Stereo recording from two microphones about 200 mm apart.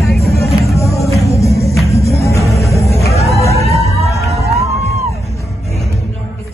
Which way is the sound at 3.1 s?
30° left (ahead or behind).